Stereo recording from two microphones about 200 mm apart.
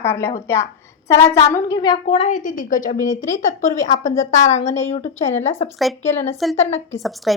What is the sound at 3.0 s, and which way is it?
Speech, 15° left (ahead or behind).